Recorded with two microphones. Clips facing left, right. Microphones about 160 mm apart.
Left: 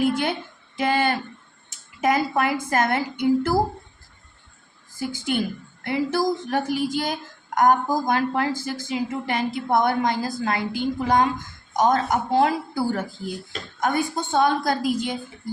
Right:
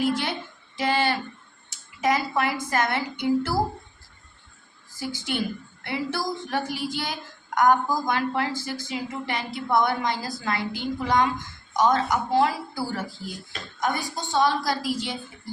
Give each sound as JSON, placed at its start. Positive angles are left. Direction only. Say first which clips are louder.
{"t": 0.0, "sound": "a sound", "louder": "left 3 dB", "side_deg": 50}
{"t": 0.8, "sound": "speech", "louder": "left 2 dB", "side_deg": 50}
{"t": 4.9, "sound": "speech", "louder": "left 4 dB", "side_deg": 50}